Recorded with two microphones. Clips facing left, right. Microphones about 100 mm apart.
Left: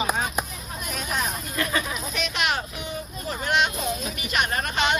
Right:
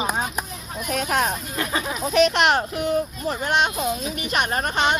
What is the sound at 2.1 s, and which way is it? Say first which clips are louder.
Speech: right 10 dB; 80° right.